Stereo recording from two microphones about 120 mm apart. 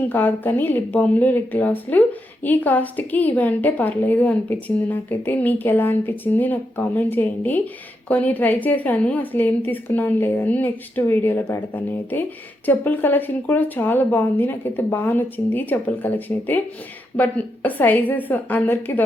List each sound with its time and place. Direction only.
0.1 s speech: 15° left (ahead or behind)